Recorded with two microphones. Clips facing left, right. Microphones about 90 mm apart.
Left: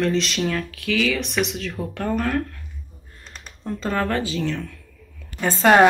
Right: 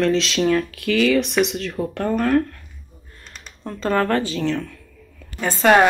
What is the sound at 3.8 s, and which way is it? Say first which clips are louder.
Speech: right 4 dB; 45° right (ahead or behind).